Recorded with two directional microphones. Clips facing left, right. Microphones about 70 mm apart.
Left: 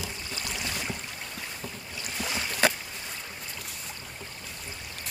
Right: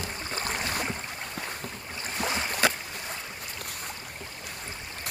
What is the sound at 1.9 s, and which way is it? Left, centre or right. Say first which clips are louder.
Boat: right 3 dB; right.